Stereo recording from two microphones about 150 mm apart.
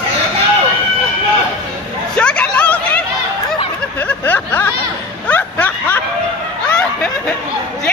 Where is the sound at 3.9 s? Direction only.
10° left (ahead or behind).